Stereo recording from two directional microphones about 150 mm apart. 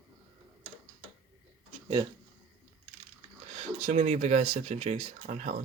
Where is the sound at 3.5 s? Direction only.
50° right (ahead or behind).